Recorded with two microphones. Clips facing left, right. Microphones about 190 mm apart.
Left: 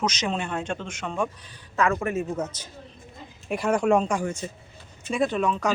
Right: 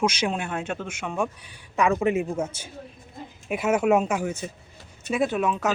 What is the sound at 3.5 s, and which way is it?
Speech, 5° right (ahead or behind).